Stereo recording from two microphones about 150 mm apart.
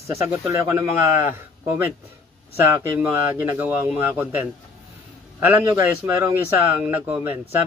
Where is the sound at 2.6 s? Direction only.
15° right (ahead or behind).